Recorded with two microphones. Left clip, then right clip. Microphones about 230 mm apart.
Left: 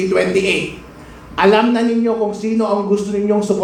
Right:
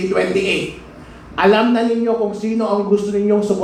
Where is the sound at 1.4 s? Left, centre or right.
Left.